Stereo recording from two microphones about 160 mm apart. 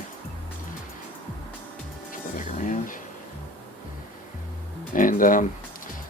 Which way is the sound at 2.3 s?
55° left (ahead or behind).